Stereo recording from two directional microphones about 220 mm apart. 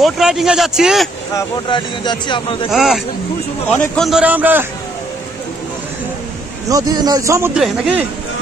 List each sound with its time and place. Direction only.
0.0 s speech: centre (ahead or behind)
1.3 s speech: 20° left (ahead or behind)
2.7 s speech: centre (ahead or behind)
6.7 s speech: 20° right (ahead or behind)
7.5 s speech: centre (ahead or behind)